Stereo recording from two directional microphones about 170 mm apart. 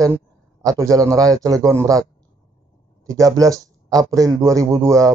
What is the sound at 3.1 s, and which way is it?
A man's voice, 20° right (ahead or behind).